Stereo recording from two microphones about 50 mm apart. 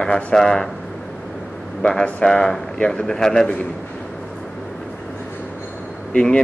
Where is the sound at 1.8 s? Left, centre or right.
Centre.